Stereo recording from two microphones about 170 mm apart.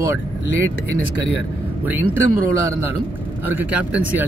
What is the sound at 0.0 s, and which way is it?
Speech, 15° right (ahead or behind).